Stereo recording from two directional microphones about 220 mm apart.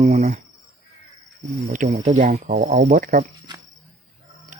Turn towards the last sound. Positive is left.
turn(degrees=-40)  # may be behind; listen again after turning